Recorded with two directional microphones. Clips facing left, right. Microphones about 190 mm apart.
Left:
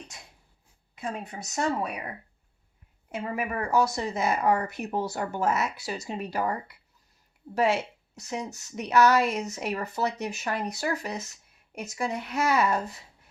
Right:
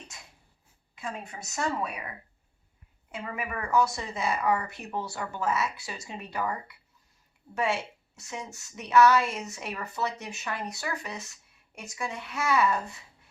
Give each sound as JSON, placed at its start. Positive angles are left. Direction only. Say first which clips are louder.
{"t": 1.5, "sound": "a woman's voice", "louder": "left 3 dB", "side_deg": 40}
{"t": 3.2, "sound": "a woman's voice", "louder": "left 5 dB", "side_deg": 35}